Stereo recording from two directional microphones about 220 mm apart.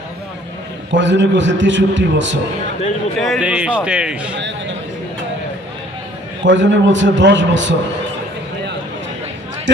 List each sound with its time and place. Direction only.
0.9 s a man's voice: 55° right (ahead or behind)
3.2 s a man's voice: centre (ahead or behind)
6.4 s a man's voice: 55° right (ahead or behind)